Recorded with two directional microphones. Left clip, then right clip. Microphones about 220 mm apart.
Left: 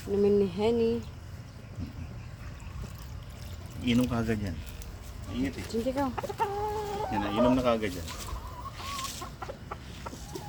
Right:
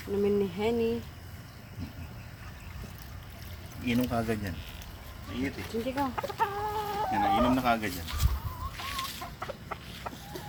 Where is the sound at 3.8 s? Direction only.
5° left (ahead or behind).